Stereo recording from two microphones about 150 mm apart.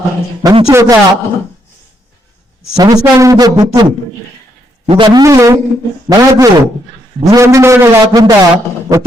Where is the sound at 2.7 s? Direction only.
25° right (ahead or behind).